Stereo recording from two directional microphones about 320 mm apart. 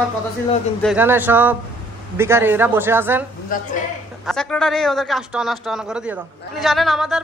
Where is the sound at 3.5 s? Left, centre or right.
Left.